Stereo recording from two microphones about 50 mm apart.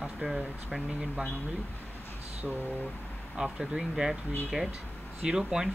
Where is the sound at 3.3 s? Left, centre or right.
Centre.